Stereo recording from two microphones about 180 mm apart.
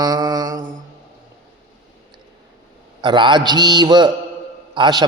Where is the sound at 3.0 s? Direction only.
25° right (ahead or behind).